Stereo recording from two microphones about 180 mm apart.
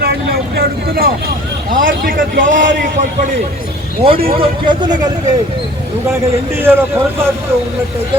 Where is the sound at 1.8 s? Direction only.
50° right (ahead or behind).